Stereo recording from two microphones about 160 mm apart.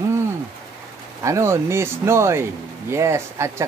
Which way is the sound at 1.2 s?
20° right (ahead or behind).